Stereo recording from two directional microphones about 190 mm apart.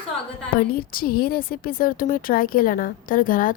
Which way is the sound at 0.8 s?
50° left (ahead or behind).